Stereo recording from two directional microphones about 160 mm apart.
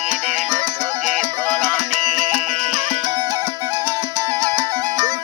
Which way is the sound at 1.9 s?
45° right (ahead or behind).